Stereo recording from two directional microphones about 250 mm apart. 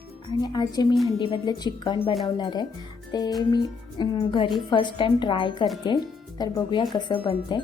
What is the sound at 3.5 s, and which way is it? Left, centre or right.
A woman's voice, centre.